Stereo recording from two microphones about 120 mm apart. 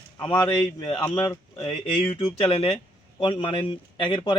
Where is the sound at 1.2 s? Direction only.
25° left (ahead or behind).